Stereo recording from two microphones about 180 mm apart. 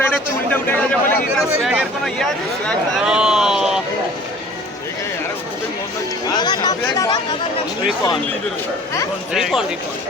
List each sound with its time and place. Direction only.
0.0 s a sound: 10° left (ahead or behind)
2.6 s speech: centre (ahead or behind)
6.2 s speech: 25° left (ahead or behind)
9.3 s speech: 5° right (ahead or behind)